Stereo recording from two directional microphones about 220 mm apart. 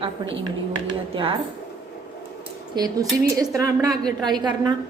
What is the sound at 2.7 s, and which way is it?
A woman's voice, 15° right (ahead or behind).